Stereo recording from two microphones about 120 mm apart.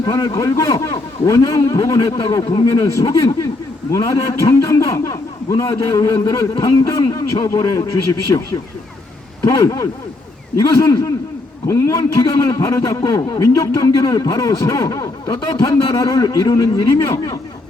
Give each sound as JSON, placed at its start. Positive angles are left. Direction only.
{"t": 0.0, "sound": "a man's voice", "side_deg": 30}
{"t": 6.5, "sound": "a man's voice", "side_deg": 40}